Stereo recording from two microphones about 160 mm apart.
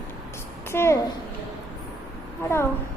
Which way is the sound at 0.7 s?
15° left (ahead or behind).